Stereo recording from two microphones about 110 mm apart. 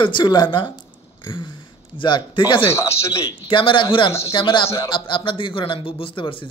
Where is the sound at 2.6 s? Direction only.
25° left (ahead or behind).